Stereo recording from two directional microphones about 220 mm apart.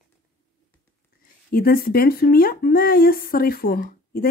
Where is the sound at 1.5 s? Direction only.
40° left (ahead or behind).